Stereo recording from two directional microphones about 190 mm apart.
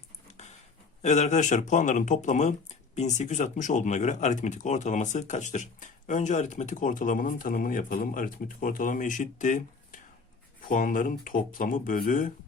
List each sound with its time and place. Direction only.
1.0 s speech: 40° left (ahead or behind)